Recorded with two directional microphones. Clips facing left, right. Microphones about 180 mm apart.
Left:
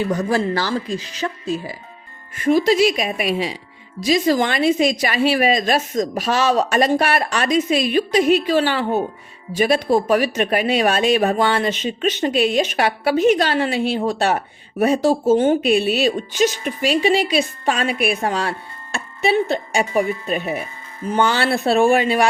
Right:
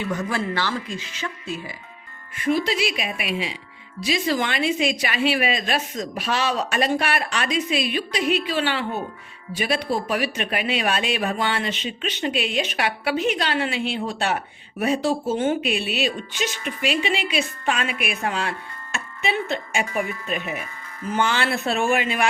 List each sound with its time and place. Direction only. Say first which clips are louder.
0.0 s speech: left 6 dB; 35° left (ahead or behind)